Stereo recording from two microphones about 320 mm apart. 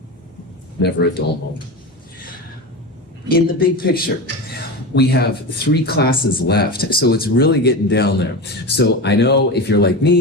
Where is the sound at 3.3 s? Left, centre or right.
Left.